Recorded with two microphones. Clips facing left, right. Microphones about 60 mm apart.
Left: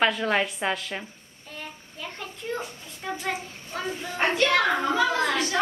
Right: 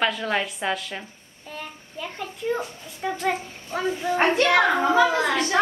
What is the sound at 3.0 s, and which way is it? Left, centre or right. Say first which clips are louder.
Speech: right 5 dB; centre.